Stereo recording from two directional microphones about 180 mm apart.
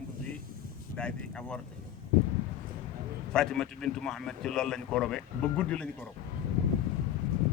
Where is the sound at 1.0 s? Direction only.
5° left (ahead or behind).